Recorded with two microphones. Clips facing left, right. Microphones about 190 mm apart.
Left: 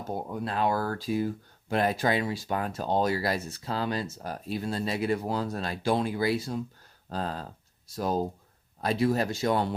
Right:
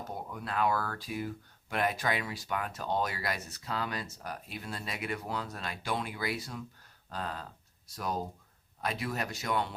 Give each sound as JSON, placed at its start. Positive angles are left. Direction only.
{"t": 0.3, "sound": "speech", "side_deg": 30}